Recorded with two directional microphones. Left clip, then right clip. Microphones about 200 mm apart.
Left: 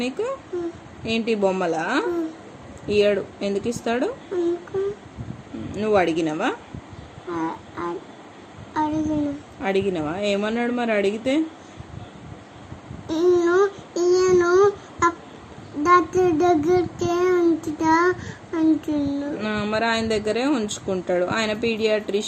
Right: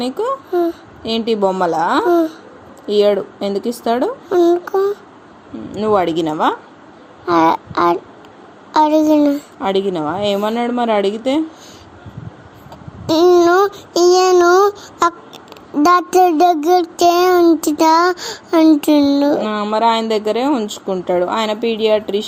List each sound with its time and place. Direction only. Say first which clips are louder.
1.0 s a woman's voice: right 6 dB; 15° right (ahead or behind)
4.3 s a sound: right 14 dB; 55° right (ahead or behind)
5.7 s a woman's voice: right 5 dB; 15° right (ahead or behind)
7.3 s child singing: right 15 dB; 55° right (ahead or behind)
8.7 s a woman's voice: right 12 dB; 55° right (ahead or behind)
9.6 s a woman's voice: right 1 dB; 15° right (ahead or behind)
13.1 s child singing: right 9 dB; 50° right (ahead or behind)
19.4 s a woman's voice: right 8 dB; 15° right (ahead or behind)